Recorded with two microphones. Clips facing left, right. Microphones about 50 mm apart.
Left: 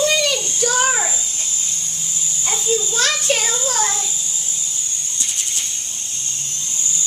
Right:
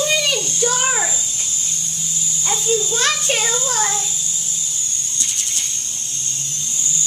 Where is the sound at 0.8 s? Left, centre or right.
Centre.